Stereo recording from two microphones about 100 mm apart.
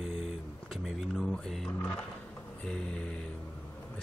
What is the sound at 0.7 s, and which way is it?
Speech, 5° left (ahead or behind).